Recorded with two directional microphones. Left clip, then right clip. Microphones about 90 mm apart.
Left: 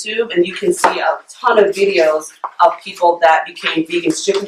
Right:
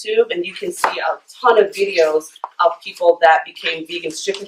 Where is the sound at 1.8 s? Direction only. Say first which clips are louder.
Left 3 dB; 30° left (ahead or behind).